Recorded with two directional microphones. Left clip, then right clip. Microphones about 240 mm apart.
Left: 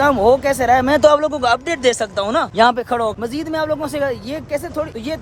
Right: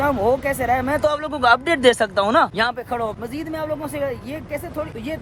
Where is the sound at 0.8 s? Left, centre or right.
Left.